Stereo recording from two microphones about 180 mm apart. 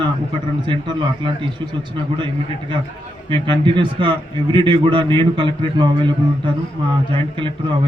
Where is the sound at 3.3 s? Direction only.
25° right (ahead or behind).